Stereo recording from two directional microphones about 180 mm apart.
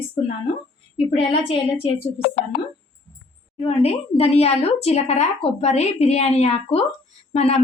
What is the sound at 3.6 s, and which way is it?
Speech, 35° left (ahead or behind).